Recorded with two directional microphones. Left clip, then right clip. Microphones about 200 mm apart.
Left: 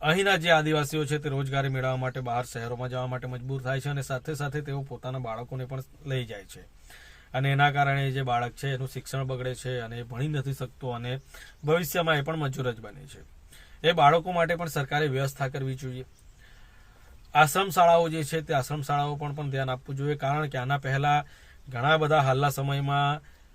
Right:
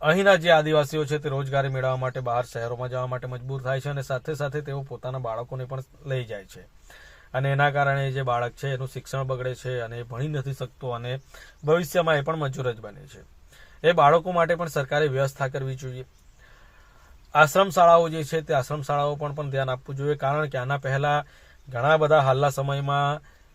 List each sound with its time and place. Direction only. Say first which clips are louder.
0.0 s a man's voice: right 5 dB; 15° left (ahead or behind)
17.3 s a man's voice: right 3 dB; 10° left (ahead or behind)